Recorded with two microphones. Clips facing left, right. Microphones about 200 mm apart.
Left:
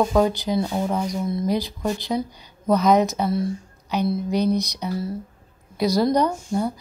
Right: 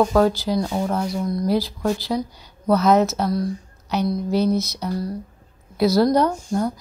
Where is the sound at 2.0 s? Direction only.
5° left (ahead or behind).